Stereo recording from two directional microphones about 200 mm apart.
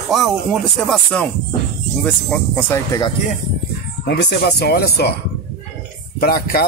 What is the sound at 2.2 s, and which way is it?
Speech, 10° left (ahead or behind).